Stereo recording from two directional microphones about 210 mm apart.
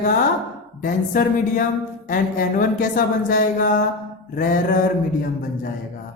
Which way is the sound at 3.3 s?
40° left (ahead or behind).